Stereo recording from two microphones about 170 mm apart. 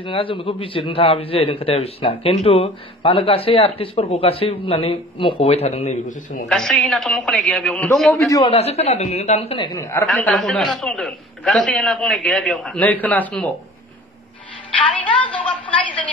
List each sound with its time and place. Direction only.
0.0 s a man's voice: 30° left (ahead or behind); by 6.4 s 45° left (ahead or behind)
6.5 s a man's voice: 5° left (ahead or behind)
8.2 s a man's voice: 20° left (ahead or behind)
8.5 s a man's voice: 35° left (ahead or behind)
9.8 s a woman's voice: 15° left (ahead or behind)
10.0 s a man's voice: centre (ahead or behind)
15.3 s a woman's voice: 10° left (ahead or behind)